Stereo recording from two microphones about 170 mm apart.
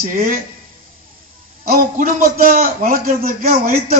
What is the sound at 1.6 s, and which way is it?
A man's voice, 55° right (ahead or behind).